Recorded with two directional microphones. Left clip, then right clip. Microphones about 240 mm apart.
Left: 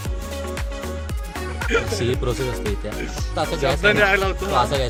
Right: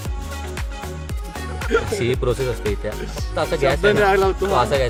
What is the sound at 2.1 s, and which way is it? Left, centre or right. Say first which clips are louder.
Speech: right 3 dB; centre.